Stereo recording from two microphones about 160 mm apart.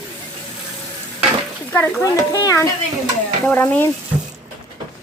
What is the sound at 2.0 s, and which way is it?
Speech, 20° left (ahead or behind).